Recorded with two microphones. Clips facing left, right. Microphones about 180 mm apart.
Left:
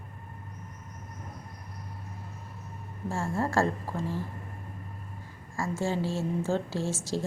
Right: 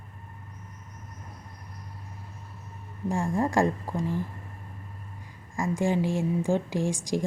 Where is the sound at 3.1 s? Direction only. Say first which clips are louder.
Right 3 dB; 15° right (ahead or behind).